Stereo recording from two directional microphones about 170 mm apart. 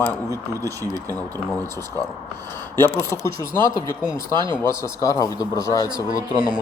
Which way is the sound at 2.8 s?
15° left (ahead or behind).